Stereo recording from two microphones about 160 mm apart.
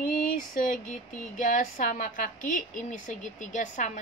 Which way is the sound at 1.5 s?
55° left (ahead or behind).